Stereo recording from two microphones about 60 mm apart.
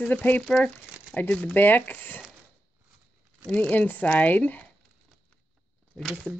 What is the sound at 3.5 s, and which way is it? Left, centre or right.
Speech, left.